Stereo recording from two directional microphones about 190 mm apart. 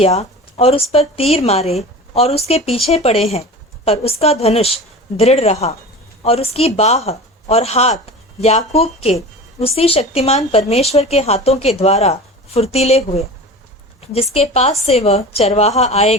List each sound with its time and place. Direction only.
0.0 s speech: 35° left (ahead or behind)
14.3 s speech: 35° left (ahead or behind)